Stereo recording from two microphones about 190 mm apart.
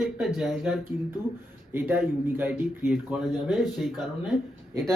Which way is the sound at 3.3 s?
Centre (ahead or behind).